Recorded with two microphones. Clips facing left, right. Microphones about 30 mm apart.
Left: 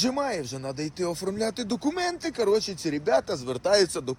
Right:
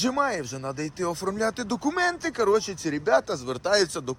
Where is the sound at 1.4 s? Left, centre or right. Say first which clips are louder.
Right 3 dB; left.